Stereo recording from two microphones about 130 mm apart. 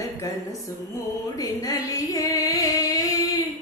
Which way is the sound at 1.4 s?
30° left (ahead or behind).